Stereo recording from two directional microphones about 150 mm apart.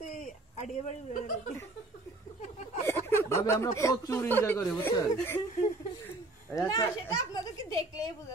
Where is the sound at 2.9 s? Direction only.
15° left (ahead or behind).